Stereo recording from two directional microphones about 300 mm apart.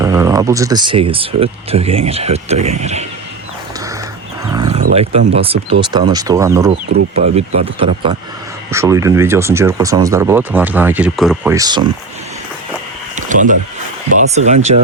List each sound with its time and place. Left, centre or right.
0.0 s speech: centre
4.4 s wild animals: centre
5.3 s speech: centre
7.2 s speech: right
13.1 s a sound: right
14.2 s speech: right